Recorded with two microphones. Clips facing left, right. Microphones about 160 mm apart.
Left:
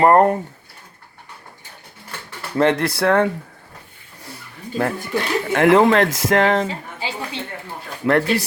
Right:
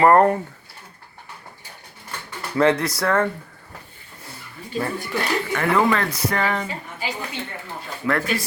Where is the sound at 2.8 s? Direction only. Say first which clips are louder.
Left 4 dB; 60° left (ahead or behind).